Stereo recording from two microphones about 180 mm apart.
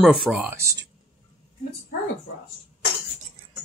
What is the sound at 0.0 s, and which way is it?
Speech, centre (ahead or behind).